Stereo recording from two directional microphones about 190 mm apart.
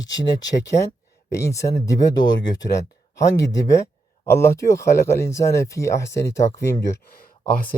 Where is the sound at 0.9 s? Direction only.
15° left (ahead or behind).